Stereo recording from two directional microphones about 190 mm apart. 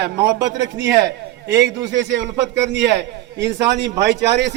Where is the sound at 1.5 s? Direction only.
65° right (ahead or behind).